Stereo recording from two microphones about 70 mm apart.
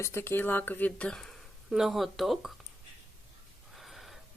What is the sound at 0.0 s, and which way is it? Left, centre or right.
Speech, left.